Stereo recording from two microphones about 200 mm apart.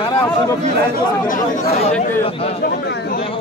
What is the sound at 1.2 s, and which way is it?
Speech, 40° left (ahead or behind).